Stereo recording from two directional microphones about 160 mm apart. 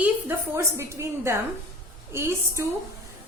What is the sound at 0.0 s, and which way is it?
A woman's voice, 15° right (ahead or behind).